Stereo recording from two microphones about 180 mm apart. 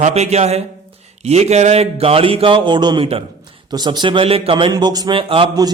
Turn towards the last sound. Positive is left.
turn(degrees=-25)  # may be behind; listen again after turning